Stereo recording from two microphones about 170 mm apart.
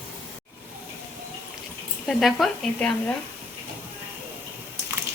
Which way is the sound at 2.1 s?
Centre (ahead or behind).